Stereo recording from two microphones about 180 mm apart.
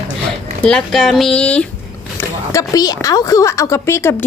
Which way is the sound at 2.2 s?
20° left (ahead or behind).